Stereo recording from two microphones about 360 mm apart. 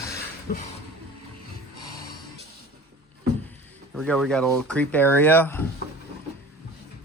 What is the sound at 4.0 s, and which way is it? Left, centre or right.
Speech, centre.